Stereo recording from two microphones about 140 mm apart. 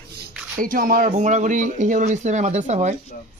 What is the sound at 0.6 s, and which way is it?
A man's voice, 85° right.